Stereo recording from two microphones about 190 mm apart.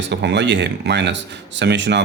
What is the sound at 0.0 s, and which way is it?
Speech, 65° right (ahead or behind).